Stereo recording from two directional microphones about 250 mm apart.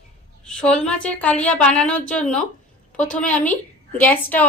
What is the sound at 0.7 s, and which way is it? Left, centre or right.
A woman's voice, centre.